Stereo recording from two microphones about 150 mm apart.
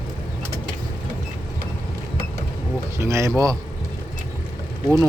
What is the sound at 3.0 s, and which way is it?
Speech, 20° right (ahead or behind).